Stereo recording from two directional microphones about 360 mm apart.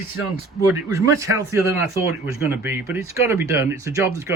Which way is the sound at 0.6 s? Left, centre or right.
Centre.